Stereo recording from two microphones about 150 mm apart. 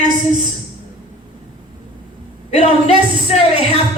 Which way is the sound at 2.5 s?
40° left (ahead or behind).